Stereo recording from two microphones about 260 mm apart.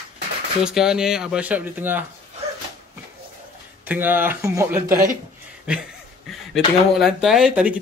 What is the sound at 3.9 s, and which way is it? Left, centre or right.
Speech, centre.